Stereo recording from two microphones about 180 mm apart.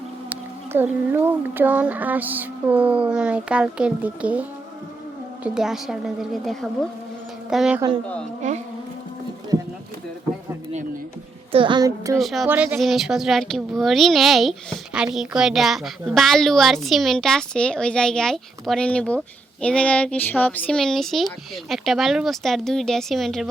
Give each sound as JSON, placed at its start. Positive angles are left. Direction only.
{"t": 0.3, "sound": "speech", "side_deg": -10}
{"t": 8.4, "sound": "insect", "side_deg": -40}
{"t": 11.5, "sound": "speech", "side_deg": -25}
{"t": 12.2, "sound": "speech", "side_deg": 0}